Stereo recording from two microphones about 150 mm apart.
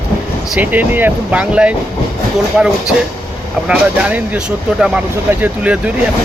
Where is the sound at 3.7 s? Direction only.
10° right (ahead or behind).